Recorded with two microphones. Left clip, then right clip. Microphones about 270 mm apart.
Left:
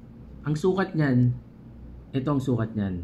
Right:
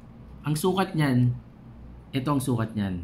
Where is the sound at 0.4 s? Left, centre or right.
Centre.